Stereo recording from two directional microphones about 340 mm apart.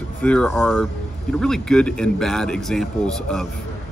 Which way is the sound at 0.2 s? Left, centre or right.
Centre.